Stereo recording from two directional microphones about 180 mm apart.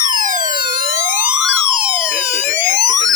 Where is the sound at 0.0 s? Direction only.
45° right (ahead or behind).